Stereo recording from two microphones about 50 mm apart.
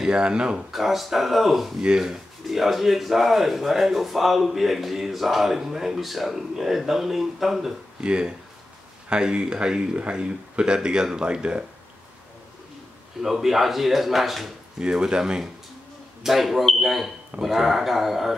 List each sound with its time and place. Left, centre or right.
0.0 s speech: centre
0.7 s speech: centre
1.8 s speech: centre
2.0 s speech: centre
8.0 s speech: centre
13.2 s speech: centre
14.8 s speech: centre
16.2 s speech: centre